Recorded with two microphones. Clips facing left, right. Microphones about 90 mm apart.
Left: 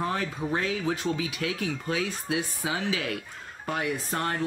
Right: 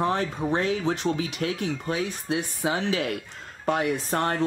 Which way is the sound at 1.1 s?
35° right (ahead or behind).